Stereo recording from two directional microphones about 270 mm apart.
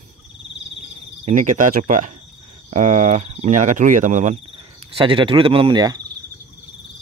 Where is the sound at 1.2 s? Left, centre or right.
Right.